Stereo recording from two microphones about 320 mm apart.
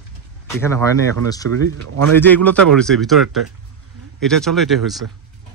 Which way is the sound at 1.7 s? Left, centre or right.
Right.